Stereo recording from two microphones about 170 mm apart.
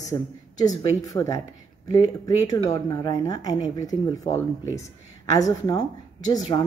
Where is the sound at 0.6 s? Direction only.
20° left (ahead or behind).